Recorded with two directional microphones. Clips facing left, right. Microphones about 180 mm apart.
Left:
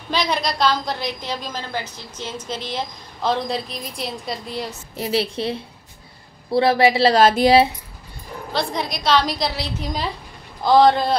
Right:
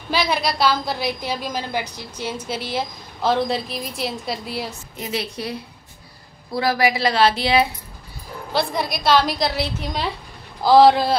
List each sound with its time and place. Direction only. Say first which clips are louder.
0.1 s a woman's voice: right 1 dB; 5° right (ahead or behind)
4.9 s a woman's voice: left 6 dB; 30° left (ahead or behind)
7.2 s a woman's voice: left 4 dB; 45° left (ahead or behind)
8.5 s a woman's voice: right 2 dB; 5° right (ahead or behind)